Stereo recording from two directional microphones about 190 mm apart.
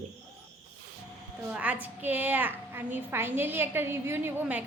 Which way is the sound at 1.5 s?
10° right (ahead or behind).